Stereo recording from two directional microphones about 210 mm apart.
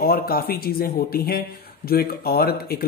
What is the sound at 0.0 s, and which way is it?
Speech, 45° left (ahead or behind).